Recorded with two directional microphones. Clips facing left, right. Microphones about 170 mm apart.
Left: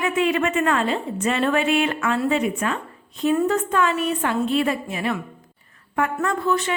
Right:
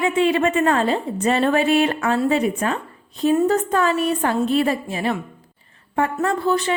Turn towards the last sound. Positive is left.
turn(degrees=-35)  # may be behind; listen again after turning